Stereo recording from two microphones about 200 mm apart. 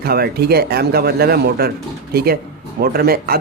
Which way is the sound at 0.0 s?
50° right (ahead or behind).